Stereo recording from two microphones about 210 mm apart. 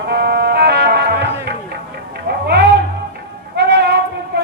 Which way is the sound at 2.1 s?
50° right (ahead or behind).